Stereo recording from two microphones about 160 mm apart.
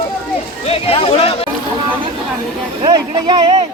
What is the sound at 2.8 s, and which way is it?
Speech, 30° right (ahead or behind).